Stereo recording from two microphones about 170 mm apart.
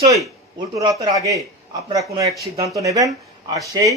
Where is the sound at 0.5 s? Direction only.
25° right (ahead or behind).